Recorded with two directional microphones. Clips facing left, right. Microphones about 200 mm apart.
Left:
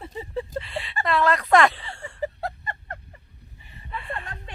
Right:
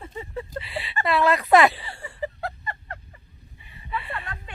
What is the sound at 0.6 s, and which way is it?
Speech, 5° right (ahead or behind).